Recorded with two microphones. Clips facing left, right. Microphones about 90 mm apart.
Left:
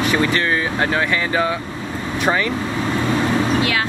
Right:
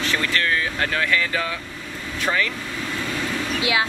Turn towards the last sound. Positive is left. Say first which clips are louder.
# left 8 dB
turn(degrees=40)  # may be behind; listen again after turning